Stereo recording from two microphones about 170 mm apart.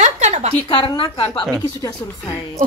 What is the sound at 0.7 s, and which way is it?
Speech, 30° left (ahead or behind).